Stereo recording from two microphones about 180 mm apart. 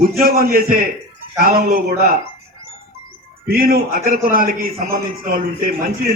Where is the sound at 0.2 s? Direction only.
55° right (ahead or behind).